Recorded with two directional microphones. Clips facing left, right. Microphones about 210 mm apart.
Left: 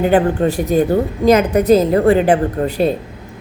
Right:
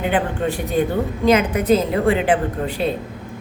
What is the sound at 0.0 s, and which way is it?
A woman's voice, 40° left (ahead or behind).